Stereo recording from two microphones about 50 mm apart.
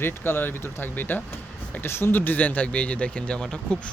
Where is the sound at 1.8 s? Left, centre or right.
Left.